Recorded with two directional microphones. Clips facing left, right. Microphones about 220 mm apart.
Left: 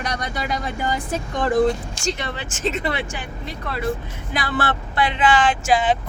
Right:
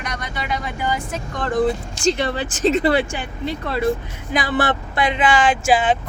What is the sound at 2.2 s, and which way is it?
Speech, 35° right (ahead or behind).